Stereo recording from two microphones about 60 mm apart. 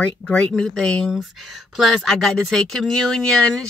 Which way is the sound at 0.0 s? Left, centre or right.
Centre.